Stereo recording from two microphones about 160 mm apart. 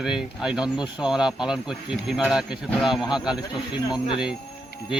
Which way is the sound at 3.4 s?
25° left (ahead or behind).